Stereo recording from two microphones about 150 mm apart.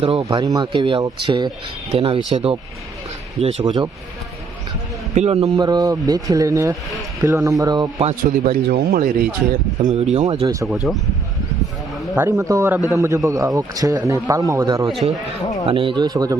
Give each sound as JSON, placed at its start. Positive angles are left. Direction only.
{"t": 0.0, "sound": "speech", "side_deg": -30}
{"t": 5.1, "sound": "speech", "side_deg": -45}
{"t": 5.5, "sound": "a man's voice", "side_deg": -25}
{"t": 8.4, "sound": "speech", "side_deg": -75}
{"t": 9.8, "sound": "speech", "side_deg": -50}
{"t": 10.4, "sound": "a man's voice", "side_deg": -20}
{"t": 10.9, "sound": "speech", "side_deg": 0}
{"t": 12.1, "sound": "a man's voice", "side_deg": -15}
{"t": 15.6, "sound": "a man's voice", "side_deg": -35}